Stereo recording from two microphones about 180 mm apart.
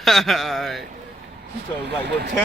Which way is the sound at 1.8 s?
70° right (ahead or behind).